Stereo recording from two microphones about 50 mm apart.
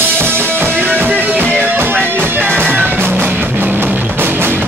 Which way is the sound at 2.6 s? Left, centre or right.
Right.